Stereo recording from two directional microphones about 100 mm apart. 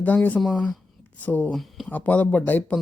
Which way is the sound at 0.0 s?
15° left (ahead or behind).